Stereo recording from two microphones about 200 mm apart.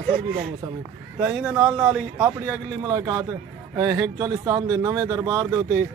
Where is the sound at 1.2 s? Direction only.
Centre (ahead or behind).